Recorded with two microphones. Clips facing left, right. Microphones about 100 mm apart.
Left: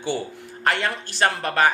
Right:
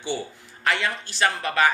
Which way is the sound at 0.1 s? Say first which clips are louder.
Left 2 dB; 45° left (ahead or behind).